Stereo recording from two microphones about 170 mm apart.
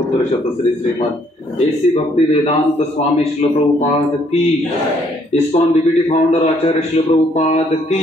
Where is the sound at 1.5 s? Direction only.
35° left (ahead or behind).